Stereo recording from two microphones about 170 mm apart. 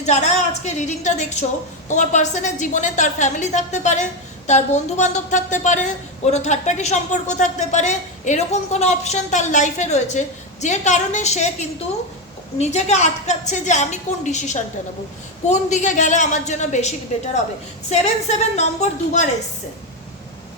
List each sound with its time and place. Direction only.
0.0 s a woman's voice: 40° left (ahead or behind)
12.5 s a woman's voice: 40° left (ahead or behind)